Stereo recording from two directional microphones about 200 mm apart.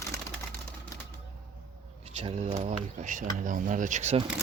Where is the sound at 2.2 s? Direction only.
35° right (ahead or behind).